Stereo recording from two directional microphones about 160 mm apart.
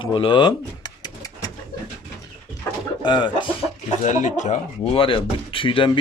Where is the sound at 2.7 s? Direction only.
15° left (ahead or behind).